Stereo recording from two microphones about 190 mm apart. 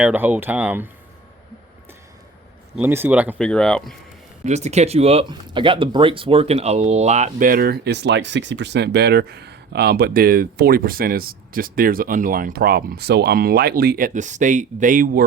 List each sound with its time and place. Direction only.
0.0 s speech: 10° right (ahead or behind)
2.7 s speech: 10° right (ahead or behind)
3.3 s speech: 5° left (ahead or behind)
4.4 s speech: 35° right (ahead or behind)